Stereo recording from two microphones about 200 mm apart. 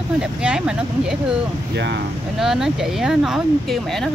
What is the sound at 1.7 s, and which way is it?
Speech, 60° right (ahead or behind).